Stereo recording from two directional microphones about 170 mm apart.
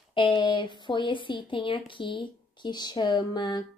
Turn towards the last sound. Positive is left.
turn(degrees=25)  # may be behind; listen again after turning